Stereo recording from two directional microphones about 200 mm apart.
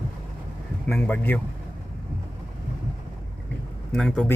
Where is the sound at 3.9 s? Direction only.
Centre (ahead or behind).